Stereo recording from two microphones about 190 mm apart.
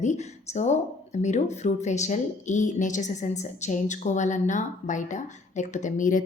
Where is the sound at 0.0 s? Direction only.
40° left (ahead or behind).